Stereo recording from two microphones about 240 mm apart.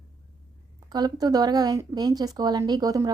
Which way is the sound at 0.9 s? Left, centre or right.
Centre.